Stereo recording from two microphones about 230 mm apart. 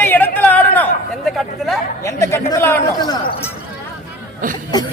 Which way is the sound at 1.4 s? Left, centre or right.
Centre.